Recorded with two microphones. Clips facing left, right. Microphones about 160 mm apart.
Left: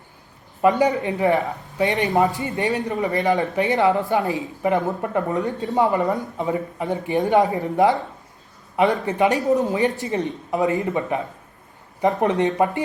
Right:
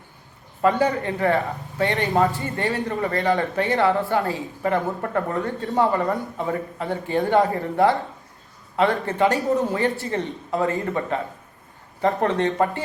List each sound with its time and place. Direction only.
0.6 s a man's voice: 15° left (ahead or behind)